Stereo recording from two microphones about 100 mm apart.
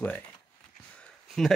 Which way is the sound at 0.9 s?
5° left (ahead or behind).